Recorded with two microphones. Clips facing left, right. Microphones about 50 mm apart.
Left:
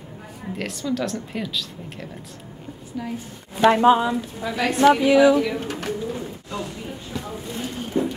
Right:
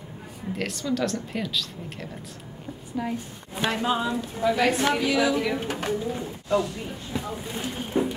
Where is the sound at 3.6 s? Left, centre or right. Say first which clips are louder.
Left 11 dB; left.